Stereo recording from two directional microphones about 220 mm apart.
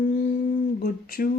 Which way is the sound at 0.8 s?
40° left (ahead or behind).